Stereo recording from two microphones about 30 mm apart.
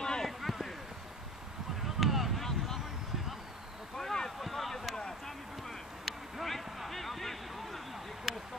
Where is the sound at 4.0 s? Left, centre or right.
Centre.